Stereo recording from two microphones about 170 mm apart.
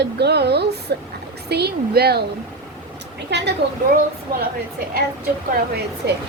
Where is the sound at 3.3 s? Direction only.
75° right (ahead or behind).